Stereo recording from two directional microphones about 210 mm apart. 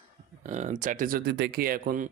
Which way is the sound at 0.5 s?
35° right (ahead or behind).